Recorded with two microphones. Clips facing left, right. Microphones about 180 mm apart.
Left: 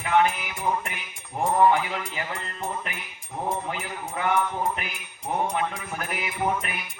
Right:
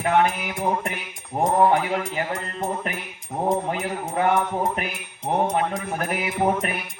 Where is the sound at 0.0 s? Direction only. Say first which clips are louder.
Right 2 dB; 50° right (ahead or behind).